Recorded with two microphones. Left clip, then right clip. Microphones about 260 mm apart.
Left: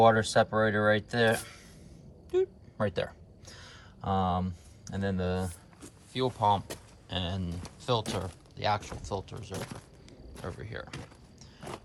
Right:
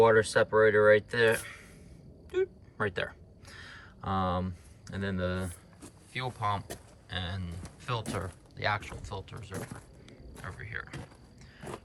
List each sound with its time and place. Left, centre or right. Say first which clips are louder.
0.0 s speech: even; centre
2.3 s a sound: left 2 dB; centre
6.1 s speech: left 6 dB; centre
10.6 s speech: right 2 dB; centre